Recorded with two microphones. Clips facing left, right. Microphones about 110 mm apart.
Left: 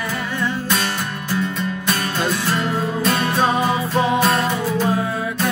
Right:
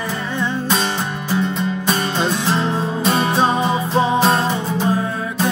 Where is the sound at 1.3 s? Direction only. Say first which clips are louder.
Right 3 dB; 20° right (ahead or behind).